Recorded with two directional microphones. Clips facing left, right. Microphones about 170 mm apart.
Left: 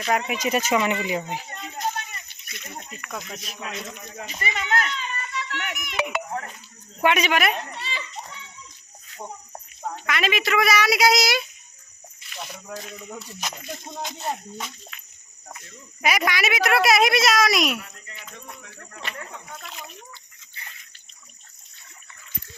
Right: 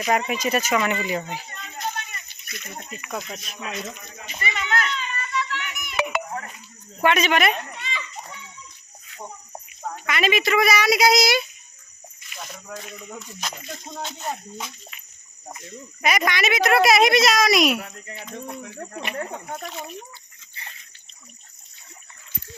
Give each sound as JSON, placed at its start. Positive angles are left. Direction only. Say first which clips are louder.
{"t": 0.3, "sound": "speech", "louder": "even", "side_deg": 15}
{"t": 2.9, "sound": "a woman's voice", "louder": "right 4 dB", "side_deg": -5}
{"t": 4.4, "sound": "a sound", "louder": "even", "side_deg": 40}
{"t": 7.0, "sound": "speech", "louder": "right 1 dB", "side_deg": 10}
{"t": 7.8, "sound": "children playing", "louder": "even", "side_deg": 35}
{"t": 10.1, "sound": "a woman's voice", "louder": "right 3 dB", "side_deg": 0}
{"t": 12.8, "sound": "a woman's voice", "louder": "even", "side_deg": 0}
{"t": 18.8, "sound": "speech", "louder": "right 11 dB", "side_deg": -35}